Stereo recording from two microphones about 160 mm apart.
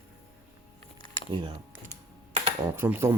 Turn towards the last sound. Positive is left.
turn(degrees=-15)  # may be behind; listen again after turning